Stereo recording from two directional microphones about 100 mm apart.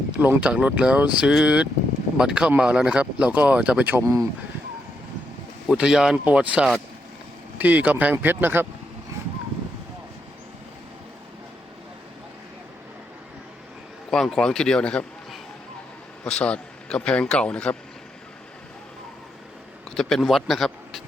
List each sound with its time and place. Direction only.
0.2 s speech: 15° right (ahead or behind)
4.0 s speech: 35° right (ahead or behind)
5.6 s speech: 10° right (ahead or behind)
14.1 s speech: 5° left (ahead or behind)
16.2 s a man's voice: 10° left (ahead or behind)
19.9 s speech: 5° left (ahead or behind)